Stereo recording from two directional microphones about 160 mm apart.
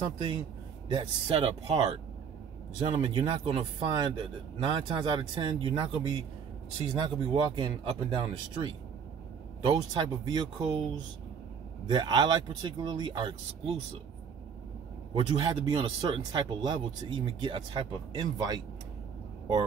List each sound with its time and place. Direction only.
0.0 s speech: 30° right (ahead or behind)
2.8 s speech: 40° right (ahead or behind)
15.1 s speech: 25° right (ahead or behind)